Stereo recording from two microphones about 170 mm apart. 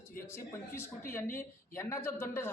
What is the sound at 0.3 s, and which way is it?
Speech, 15° left (ahead or behind).